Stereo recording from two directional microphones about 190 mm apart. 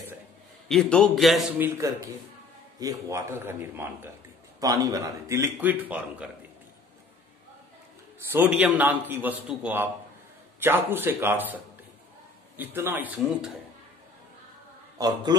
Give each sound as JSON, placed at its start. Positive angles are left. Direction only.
{"t": 0.7, "sound": "a man's voice", "side_deg": 5}
{"t": 2.8, "sound": "a man's voice", "side_deg": -15}
{"t": 8.3, "sound": "a man's voice", "side_deg": -10}
{"t": 15.0, "sound": "a man's voice", "side_deg": -20}